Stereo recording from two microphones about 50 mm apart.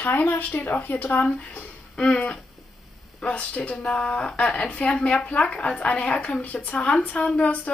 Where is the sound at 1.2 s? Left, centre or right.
Left.